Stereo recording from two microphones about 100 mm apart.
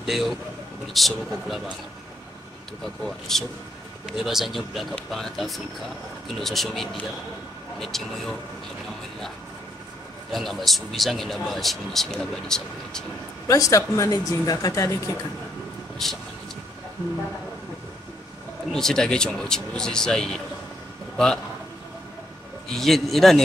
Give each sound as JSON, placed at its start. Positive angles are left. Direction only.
{"t": 0.0, "sound": "a man's voice", "side_deg": 0}
{"t": 2.8, "sound": "a man's voice", "side_deg": 5}
{"t": 10.3, "sound": "a man's voice", "side_deg": 0}
{"t": 13.5, "sound": "speech", "side_deg": 35}
{"t": 18.7, "sound": "speech", "side_deg": 5}
{"t": 22.7, "sound": "a man's voice", "side_deg": 0}